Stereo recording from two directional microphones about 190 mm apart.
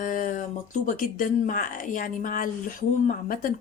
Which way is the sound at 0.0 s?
45° left (ahead or behind).